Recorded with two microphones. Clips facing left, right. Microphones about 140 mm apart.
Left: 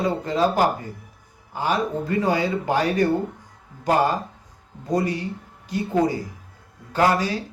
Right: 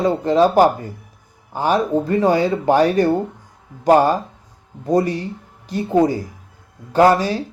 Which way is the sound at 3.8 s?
30° right (ahead or behind).